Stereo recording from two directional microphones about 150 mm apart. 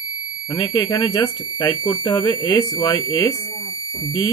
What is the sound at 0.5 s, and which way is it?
Speech, 30° left (ahead or behind).